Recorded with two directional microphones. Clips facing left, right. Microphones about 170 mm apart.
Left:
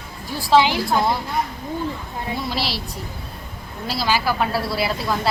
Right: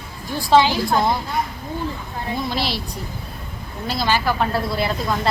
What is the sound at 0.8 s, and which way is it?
Speech, centre (ahead or behind).